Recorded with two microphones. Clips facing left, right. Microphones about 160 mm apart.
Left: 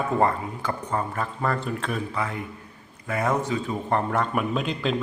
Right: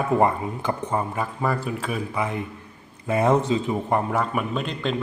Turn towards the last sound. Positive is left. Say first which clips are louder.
# left 1 dB
turn(degrees=0)  # may be behind; listen again after turning